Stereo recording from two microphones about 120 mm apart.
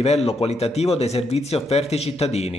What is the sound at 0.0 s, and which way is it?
Speech, 60° left (ahead or behind).